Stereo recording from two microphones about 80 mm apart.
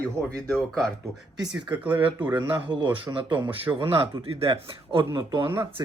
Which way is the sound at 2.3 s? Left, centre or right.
Right.